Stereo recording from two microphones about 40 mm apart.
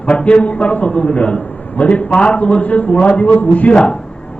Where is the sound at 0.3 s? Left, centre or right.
Left.